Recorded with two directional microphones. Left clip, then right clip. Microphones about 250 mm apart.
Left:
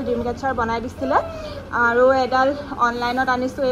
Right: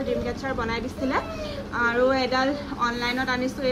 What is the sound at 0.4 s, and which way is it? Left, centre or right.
A woman's voice, centre.